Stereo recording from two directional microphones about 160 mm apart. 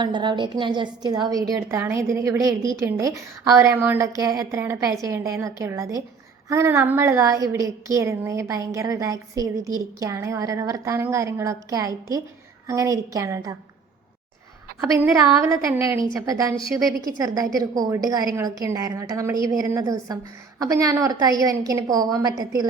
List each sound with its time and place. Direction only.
0.0 s a woman's voice: 30° right (ahead or behind)
14.9 s a woman's voice: 15° right (ahead or behind)